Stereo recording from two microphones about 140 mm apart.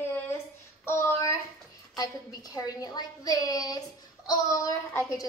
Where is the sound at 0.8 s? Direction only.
20° left (ahead or behind).